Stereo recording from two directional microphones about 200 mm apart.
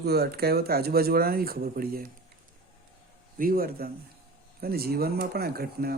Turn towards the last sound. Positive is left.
turn(degrees=-50)  # may be behind; listen again after turning